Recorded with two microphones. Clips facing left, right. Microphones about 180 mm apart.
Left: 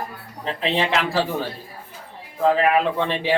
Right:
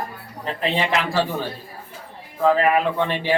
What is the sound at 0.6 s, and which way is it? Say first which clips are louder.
Speech: even; centre (ahead or behind).